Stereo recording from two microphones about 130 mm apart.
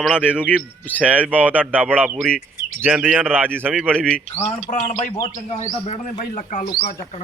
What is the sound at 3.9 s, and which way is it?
Speech, 10° left (ahead or behind).